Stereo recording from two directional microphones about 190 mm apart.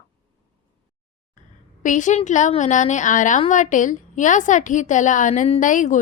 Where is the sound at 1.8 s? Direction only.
40° left (ahead or behind).